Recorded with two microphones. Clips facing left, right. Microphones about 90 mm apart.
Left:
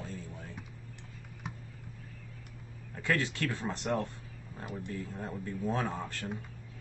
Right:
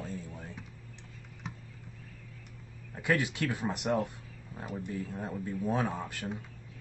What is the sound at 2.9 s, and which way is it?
Speech, 15° right (ahead or behind).